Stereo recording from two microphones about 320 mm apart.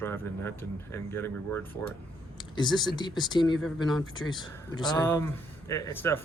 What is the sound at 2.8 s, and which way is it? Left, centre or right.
Speech, centre.